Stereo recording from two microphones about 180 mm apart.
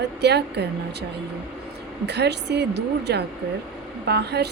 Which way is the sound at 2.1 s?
70° right (ahead or behind).